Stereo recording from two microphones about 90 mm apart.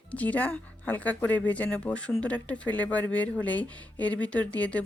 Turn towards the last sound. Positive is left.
turn(degrees=15)  # may be behind; listen again after turning